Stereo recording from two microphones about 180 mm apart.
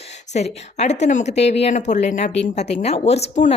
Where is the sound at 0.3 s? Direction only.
40° left (ahead or behind).